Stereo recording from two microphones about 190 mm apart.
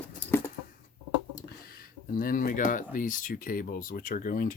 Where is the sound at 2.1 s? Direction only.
45° left (ahead or behind).